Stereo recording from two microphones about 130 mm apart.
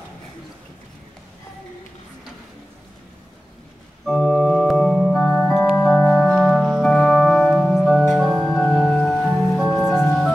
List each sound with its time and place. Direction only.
4.0 s organ: 5° left (ahead or behind)
8.1 s music: centre (ahead or behind)
9.8 s music: 20° left (ahead or behind)